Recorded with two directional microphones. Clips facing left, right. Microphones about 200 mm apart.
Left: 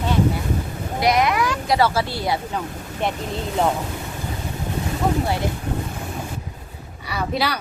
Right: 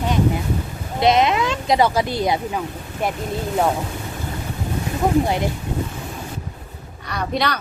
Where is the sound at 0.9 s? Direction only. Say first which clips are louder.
Right 2 dB; 25° right (ahead or behind).